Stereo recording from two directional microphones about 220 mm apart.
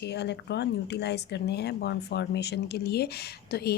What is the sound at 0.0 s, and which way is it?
A woman's voice, 50° left (ahead or behind).